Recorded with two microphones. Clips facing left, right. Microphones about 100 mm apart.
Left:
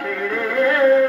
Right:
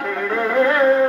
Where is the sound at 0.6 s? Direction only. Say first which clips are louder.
Right 1 dB; 25° right (ahead or behind).